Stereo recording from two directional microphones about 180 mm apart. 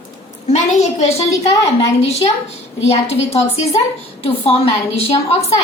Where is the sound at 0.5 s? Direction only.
40° left (ahead or behind).